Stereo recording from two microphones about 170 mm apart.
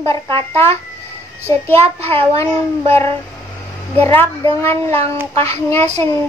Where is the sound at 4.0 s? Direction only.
10° left (ahead or behind).